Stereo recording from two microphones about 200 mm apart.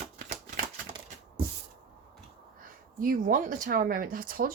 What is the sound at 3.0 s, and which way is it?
Speech, 45° right (ahead or behind).